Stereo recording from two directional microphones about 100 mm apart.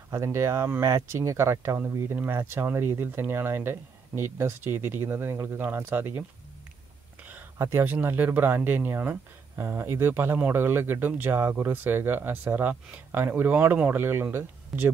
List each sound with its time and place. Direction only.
0.1 s speech: 30° right (ahead or behind)
7.5 s speech: 30° right (ahead or behind)
7.8 s speech: 20° right (ahead or behind)